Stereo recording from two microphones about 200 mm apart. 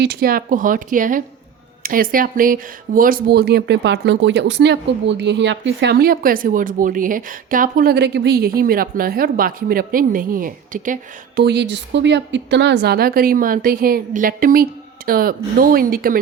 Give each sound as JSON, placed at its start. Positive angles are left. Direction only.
{"t": 0.0, "sound": "speech", "side_deg": -50}